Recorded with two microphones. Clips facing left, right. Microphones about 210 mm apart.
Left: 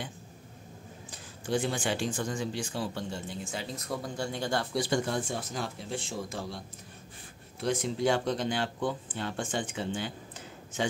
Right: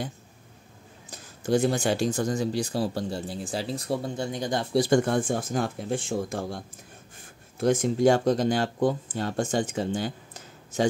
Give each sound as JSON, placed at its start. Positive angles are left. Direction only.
{"t": 1.1, "sound": "speech", "side_deg": -40}
{"t": 4.7, "sound": "speech", "side_deg": -45}
{"t": 7.6, "sound": "speech", "side_deg": -45}